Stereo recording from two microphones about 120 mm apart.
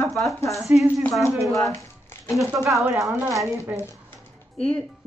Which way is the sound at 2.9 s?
25° right (ahead or behind).